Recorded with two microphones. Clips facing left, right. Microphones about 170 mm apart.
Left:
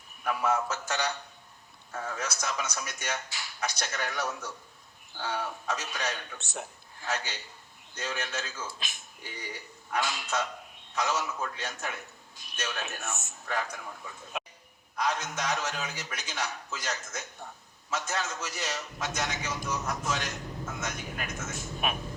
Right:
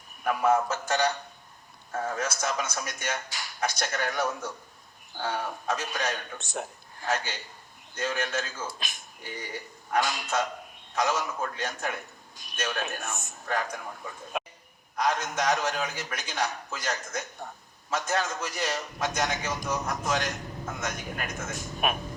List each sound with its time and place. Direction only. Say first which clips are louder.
0.3 s a man's voice: right 4 dB; 50° right (ahead or behind)